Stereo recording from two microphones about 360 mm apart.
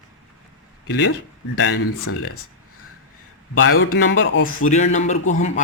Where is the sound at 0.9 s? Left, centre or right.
Left.